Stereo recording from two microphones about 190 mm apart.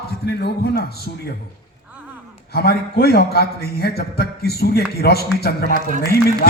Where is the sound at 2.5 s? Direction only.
55° left (ahead or behind).